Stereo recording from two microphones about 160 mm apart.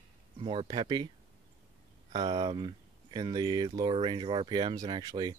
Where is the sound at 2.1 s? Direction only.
25° right (ahead or behind).